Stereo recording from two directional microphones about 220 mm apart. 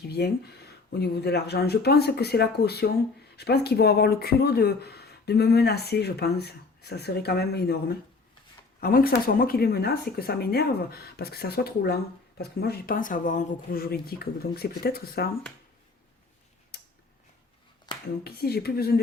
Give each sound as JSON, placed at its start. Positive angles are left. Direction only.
{"t": 0.1, "sound": "speech", "side_deg": 45}
{"t": 18.2, "sound": "speech", "side_deg": 45}